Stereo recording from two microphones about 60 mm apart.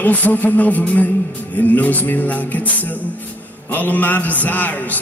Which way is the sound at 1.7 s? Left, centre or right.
Left.